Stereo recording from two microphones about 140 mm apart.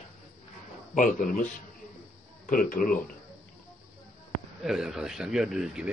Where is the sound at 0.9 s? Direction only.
75° left (ahead or behind).